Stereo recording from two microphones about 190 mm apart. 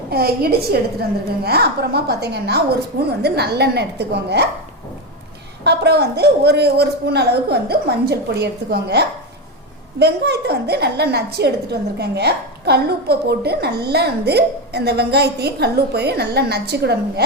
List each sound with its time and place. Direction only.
0.1 s a woman's voice: 55° right (ahead or behind)
5.6 s a woman's voice: 60° right (ahead or behind)